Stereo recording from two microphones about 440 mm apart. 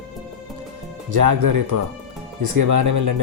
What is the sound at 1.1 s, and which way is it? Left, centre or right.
Speech, right.